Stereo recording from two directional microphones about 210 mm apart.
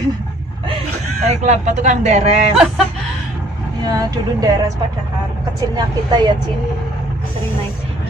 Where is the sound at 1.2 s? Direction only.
35° right (ahead or behind).